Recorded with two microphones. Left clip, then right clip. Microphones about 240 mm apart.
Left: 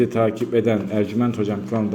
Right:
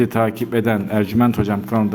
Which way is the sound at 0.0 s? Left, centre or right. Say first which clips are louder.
Right 1 dB; right.